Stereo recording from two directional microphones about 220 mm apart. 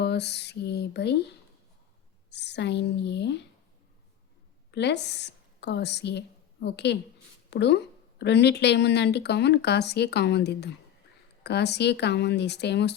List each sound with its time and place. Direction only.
0.0 s speech: 50° left (ahead or behind)
2.3 s speech: 50° left (ahead or behind)
4.7 s a woman's voice: 50° left (ahead or behind)